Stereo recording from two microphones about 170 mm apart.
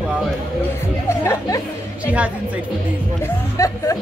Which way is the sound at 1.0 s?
15° left (ahead or behind).